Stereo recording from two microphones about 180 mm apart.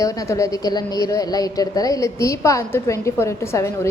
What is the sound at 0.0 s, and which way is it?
A man's voice, 20° left (ahead or behind).